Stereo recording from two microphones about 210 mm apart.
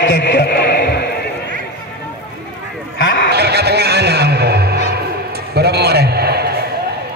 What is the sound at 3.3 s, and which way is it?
Music, 50° right (ahead or behind).